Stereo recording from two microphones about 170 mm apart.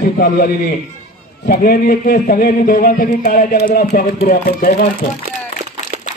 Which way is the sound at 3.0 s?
45° left (ahead or behind).